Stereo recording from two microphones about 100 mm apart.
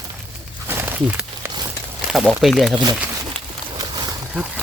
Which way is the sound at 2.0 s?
5° right (ahead or behind).